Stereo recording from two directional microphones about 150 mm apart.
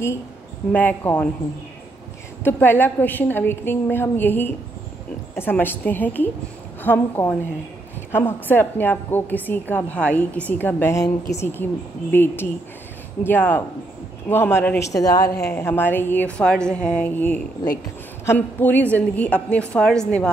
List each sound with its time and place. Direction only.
0.7 s a woman's voice: 10° left (ahead or behind)
2.4 s a woman's voice: 15° left (ahead or behind)
14.9 s a woman's voice: 25° left (ahead or behind)
15.2 s speech: 90° left
15.5 s a woman's voice: 15° left (ahead or behind)
17.6 s a woman's voice: 25° left (ahead or behind)
18.2 s a woman's voice: 15° left (ahead or behind)